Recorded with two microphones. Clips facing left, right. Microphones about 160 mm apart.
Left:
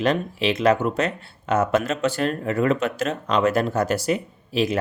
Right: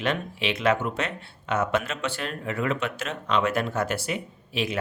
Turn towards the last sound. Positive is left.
turn(degrees=40)  # may be behind; listen again after turning